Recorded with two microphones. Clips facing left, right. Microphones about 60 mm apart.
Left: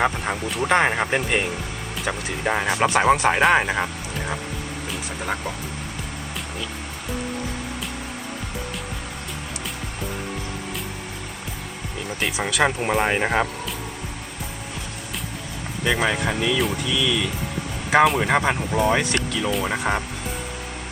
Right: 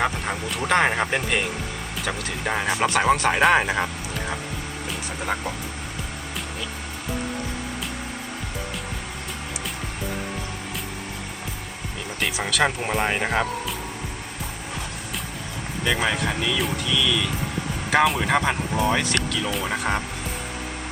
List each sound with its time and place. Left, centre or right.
0.0 s speech: centre
4.9 s music: centre
12.2 s speech: centre
15.8 s speech: centre